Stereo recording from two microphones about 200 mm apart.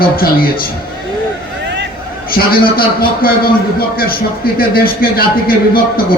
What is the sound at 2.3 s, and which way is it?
Speech, 45° left (ahead or behind).